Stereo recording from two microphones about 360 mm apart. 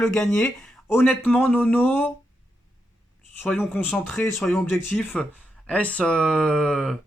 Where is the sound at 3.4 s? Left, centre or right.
Centre.